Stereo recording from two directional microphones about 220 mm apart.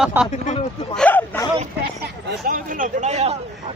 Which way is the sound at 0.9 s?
5° left (ahead or behind).